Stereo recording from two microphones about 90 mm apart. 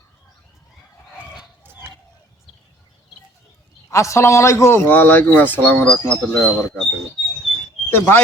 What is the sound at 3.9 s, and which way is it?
Speech, 35° left (ahead or behind).